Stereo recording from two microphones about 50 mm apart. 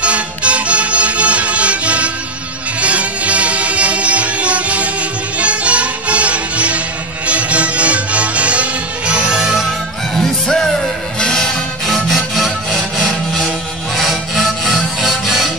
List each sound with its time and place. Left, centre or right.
0.0 s music: right
10.1 s music: centre
12.7 s sawing: centre
13.9 s sawing: centre
15.0 s music: centre